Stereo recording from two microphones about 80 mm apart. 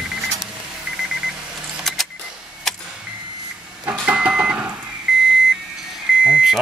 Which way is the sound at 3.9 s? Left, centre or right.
Centre.